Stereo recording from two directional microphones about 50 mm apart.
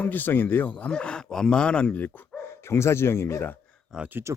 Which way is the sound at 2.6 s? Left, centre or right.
Left.